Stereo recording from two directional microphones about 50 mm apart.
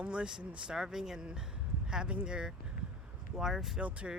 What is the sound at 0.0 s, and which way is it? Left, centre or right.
Speech, right.